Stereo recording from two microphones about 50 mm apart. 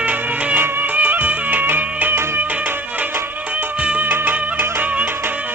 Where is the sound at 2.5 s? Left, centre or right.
Right.